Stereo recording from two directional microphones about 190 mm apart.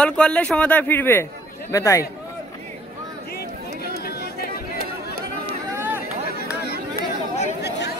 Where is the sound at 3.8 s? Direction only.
55° left (ahead or behind).